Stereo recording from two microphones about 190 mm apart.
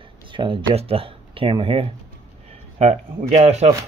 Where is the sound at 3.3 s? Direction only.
35° right (ahead or behind).